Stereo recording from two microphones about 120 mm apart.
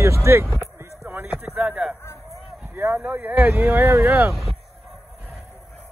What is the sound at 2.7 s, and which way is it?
Speech, 15° right (ahead or behind).